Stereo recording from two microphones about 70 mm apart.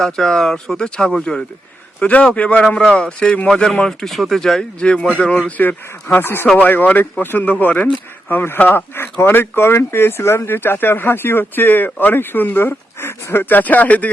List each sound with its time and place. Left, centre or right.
0.0 s speech: centre
5.5 s a man's voice: left
8.3 s speech: left